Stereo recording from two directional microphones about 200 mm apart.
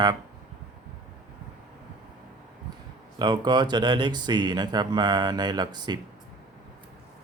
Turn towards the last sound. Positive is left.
turn(degrees=-20)  # may be behind; listen again after turning